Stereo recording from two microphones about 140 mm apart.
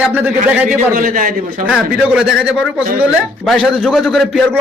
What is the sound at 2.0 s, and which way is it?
A man's voice, 5° right (ahead or behind).